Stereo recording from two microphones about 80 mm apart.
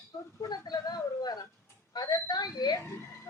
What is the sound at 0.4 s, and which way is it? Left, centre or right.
Speech, left.